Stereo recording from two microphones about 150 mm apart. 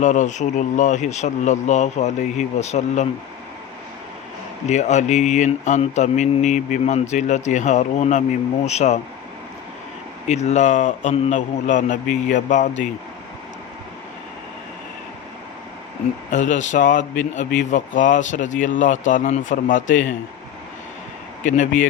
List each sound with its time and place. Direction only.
0.0 s mantra: 55° left (ahead or behind)
4.7 s mantra: 50° left (ahead or behind)
10.2 s mantra: 50° left (ahead or behind)
12.3 s speech: 55° left (ahead or behind)
16.3 s speech: 60° left (ahead or behind)
21.4 s speech: 55° left (ahead or behind)